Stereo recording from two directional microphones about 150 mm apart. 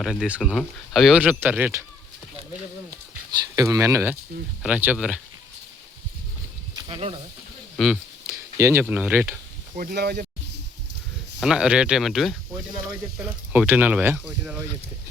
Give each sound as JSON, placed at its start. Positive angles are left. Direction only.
{"t": 0.0, "sound": "speech", "side_deg": -5}
{"t": 3.5, "sound": "speech", "side_deg": -20}
{"t": 6.7, "sound": "a sound", "side_deg": -35}
{"t": 7.8, "sound": "speech", "side_deg": 0}
{"t": 8.3, "sound": "speech", "side_deg": -15}
{"t": 9.7, "sound": "speech", "side_deg": -80}
{"t": 11.3, "sound": "speech", "side_deg": -5}
{"t": 13.5, "sound": "speech", "side_deg": -10}